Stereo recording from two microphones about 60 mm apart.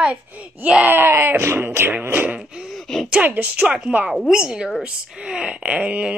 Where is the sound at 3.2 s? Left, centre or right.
Right.